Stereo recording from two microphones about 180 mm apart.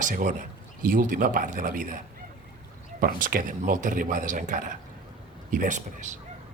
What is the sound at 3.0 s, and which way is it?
Speech, 50° right (ahead or behind).